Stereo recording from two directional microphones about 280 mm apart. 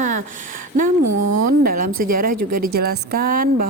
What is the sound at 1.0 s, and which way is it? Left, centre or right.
Speech, right.